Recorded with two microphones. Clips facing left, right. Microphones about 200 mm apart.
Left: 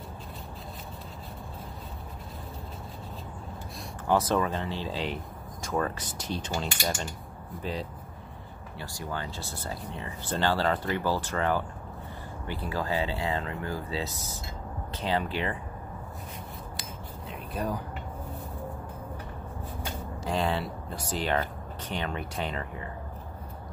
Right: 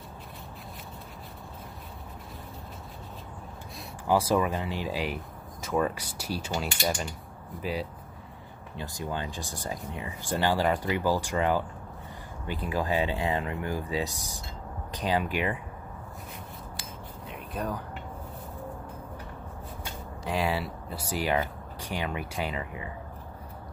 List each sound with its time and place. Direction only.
4.1 s speech: 10° right (ahead or behind)
8.7 s speech: 20° right (ahead or behind)
17.3 s a sound: centre (ahead or behind)
20.2 s speech: 5° right (ahead or behind)